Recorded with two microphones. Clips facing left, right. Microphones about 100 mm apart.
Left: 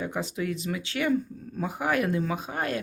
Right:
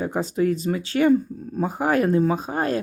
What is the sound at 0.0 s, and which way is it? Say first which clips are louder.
Speech: right 8 dB; 40° right (ahead or behind).